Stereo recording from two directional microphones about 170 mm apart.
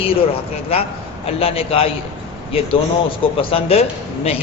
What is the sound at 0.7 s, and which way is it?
A man's voice, 35° left (ahead or behind).